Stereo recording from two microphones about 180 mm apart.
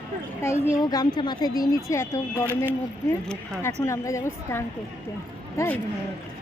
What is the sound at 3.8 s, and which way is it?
A woman's voice, 15° left (ahead or behind).